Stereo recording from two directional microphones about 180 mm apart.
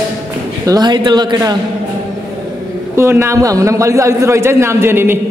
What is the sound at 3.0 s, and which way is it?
A man's voice, 15° right (ahead or behind).